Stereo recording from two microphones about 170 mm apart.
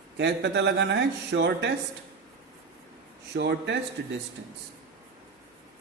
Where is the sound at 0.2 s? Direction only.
90° right.